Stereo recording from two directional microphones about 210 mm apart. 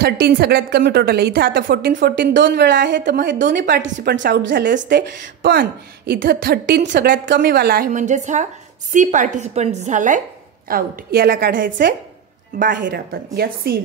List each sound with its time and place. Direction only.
0.0 s a woman's voice: 45° right (ahead or behind)
12.7 s a woman's voice: 50° right (ahead or behind)